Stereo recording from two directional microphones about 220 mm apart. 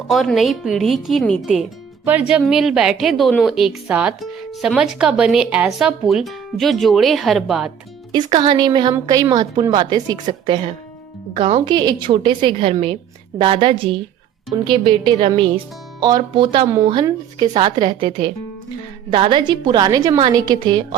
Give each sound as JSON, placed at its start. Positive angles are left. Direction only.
{"t": 0.1, "sound": "a woman's voice", "side_deg": 0}
{"t": 8.1, "sound": "a woman's voice", "side_deg": -20}